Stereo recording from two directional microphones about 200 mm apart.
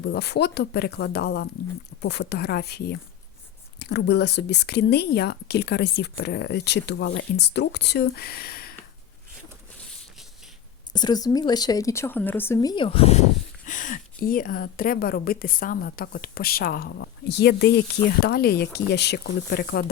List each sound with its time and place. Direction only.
0.0 s speech: 55° left (ahead or behind)
10.9 s a woman's voice: 20° left (ahead or behind)
13.7 s a woman's voice: 40° left (ahead or behind)